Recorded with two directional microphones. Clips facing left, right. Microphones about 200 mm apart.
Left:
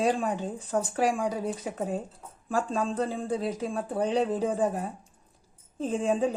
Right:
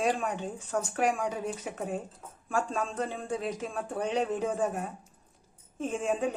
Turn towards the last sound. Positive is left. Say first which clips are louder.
# left 4 dB
turn(degrees=30)  # may be behind; listen again after turning